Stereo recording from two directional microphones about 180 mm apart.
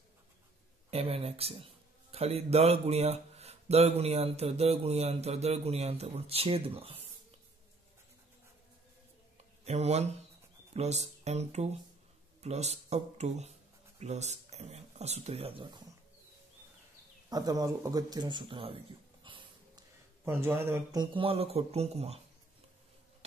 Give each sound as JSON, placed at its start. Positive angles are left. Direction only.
{"t": 0.8, "sound": "speech", "side_deg": -35}
{"t": 9.7, "sound": "speech", "side_deg": -35}
{"t": 17.3, "sound": "speech", "side_deg": -20}
{"t": 19.2, "sound": "a sound", "side_deg": -25}
{"t": 20.2, "sound": "speech", "side_deg": -10}